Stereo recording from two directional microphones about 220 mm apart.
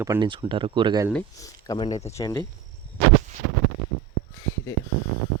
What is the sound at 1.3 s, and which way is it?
Speech, 15° left (ahead or behind).